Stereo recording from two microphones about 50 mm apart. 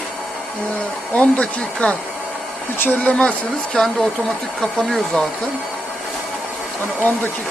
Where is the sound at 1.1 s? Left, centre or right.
Left.